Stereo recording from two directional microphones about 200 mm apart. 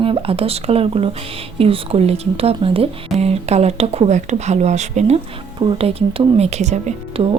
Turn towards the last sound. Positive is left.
turn(degrees=-30)  # may be behind; listen again after turning